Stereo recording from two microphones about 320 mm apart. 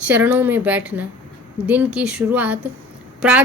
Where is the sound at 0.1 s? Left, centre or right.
Centre.